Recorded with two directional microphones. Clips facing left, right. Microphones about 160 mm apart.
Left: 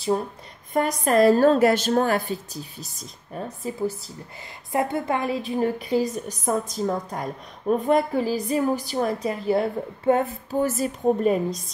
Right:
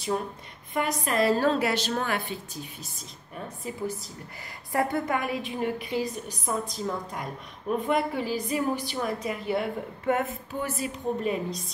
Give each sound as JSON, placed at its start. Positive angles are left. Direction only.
{"t": 0.7, "sound": "a woman's voice", "side_deg": 45}